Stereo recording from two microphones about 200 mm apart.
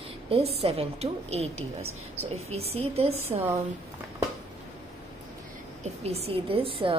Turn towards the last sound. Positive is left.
turn(degrees=-25)  # may be behind; listen again after turning